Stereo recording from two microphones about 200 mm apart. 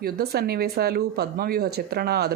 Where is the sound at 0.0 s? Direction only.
50° right (ahead or behind).